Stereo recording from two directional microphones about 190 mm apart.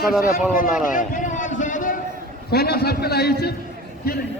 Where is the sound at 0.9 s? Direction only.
45° left (ahead or behind).